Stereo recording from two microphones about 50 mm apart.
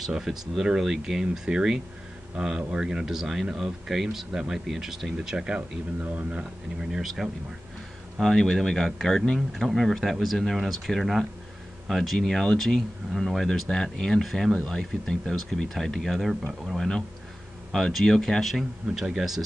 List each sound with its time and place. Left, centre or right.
0.0 s speech: centre
5.9 s speech: right
6.8 s speech: centre
8.2 s speech: centre